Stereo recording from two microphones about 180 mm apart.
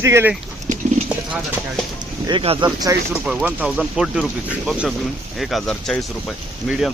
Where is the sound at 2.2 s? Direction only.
30° right (ahead or behind).